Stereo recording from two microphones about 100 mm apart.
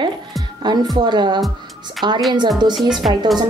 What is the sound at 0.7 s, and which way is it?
A woman's voice, 45° right (ahead or behind).